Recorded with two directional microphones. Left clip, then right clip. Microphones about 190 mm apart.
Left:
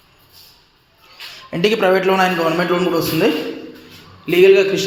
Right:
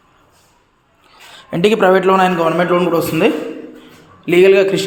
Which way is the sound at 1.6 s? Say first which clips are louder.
Right 3 dB; 25° right (ahead or behind).